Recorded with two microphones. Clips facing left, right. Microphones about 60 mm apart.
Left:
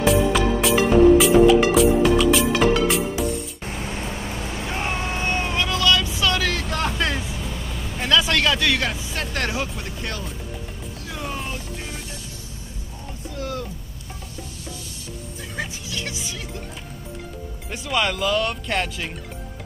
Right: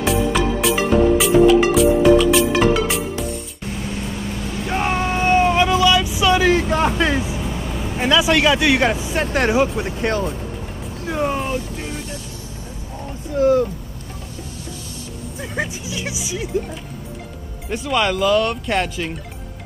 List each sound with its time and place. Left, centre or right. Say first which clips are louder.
0.0 s music: even; centre
3.6 s music: right 3 dB; left
4.0 s vehicle: right 3 dB; centre
4.6 s vehicle: right 7 dB; right
11.1 s music: right 11 dB; right
11.3 s boat: right 7 dB; centre
13.4 s speech: right 15 dB; right
15.4 s speech: right 6 dB; right
17.6 s speech: right 4 dB; centre